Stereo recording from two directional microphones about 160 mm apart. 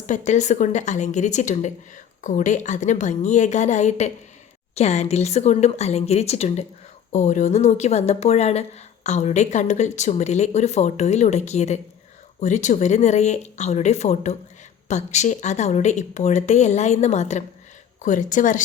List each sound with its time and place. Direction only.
0.3 s a woman's voice: 50° left (ahead or behind)